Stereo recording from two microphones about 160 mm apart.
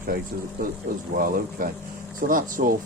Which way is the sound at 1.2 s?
60° right (ahead or behind).